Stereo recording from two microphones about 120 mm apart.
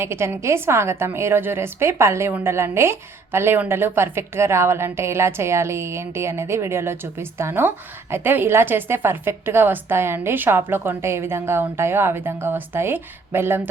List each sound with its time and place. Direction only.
0.0 s a woman's voice: 20° right (ahead or behind)